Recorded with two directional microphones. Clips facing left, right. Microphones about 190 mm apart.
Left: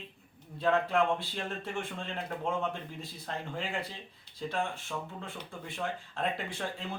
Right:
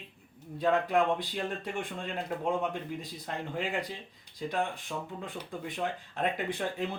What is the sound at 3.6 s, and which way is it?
A man's voice, 15° right (ahead or behind).